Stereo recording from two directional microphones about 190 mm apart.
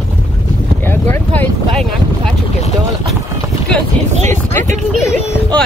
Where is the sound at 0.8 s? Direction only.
10° left (ahead or behind).